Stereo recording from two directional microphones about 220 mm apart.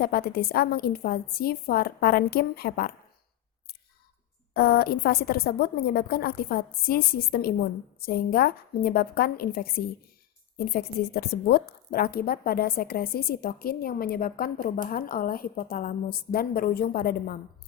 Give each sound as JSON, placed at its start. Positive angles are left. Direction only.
{"t": 0.0, "sound": "a woman's voice", "side_deg": 40}
{"t": 4.5, "sound": "a woman's voice", "side_deg": 45}